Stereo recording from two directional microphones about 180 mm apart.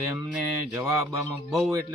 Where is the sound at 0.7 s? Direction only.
10° right (ahead or behind).